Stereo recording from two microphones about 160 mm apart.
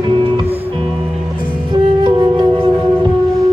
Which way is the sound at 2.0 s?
30° right (ahead or behind).